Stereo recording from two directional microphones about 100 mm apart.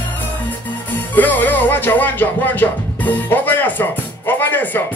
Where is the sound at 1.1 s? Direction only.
15° left (ahead or behind).